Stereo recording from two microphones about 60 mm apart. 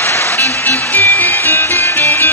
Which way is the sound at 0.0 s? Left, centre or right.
Left.